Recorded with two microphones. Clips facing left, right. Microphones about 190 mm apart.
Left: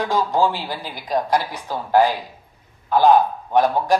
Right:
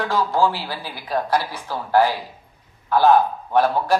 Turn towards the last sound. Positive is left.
turn(degrees=15)  # may be behind; listen again after turning